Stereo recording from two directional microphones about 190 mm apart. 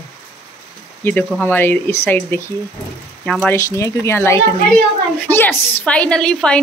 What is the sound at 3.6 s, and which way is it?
A woman's voice, 15° left (ahead or behind).